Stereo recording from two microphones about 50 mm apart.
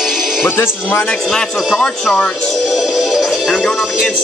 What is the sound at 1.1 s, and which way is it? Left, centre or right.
Speech, centre.